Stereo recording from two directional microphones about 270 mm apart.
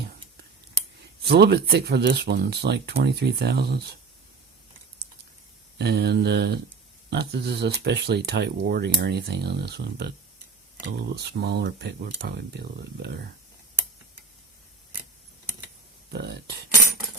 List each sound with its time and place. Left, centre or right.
1.2 s speech: right
5.7 s speech: right
16.1 s speech: right